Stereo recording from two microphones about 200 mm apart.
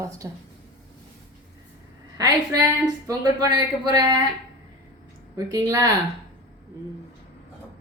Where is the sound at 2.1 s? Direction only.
20° right (ahead or behind).